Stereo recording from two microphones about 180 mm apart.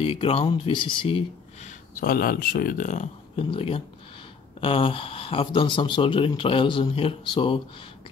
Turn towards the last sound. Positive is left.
turn(degrees=30)  # may be behind; listen again after turning